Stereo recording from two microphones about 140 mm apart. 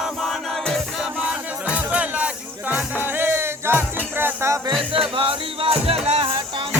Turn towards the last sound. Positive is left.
turn(degrees=-35)  # may be behind; listen again after turning